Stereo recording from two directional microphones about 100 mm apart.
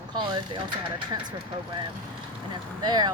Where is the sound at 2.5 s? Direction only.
50° right (ahead or behind).